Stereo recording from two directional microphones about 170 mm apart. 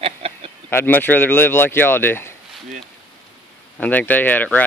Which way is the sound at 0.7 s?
10° left (ahead or behind).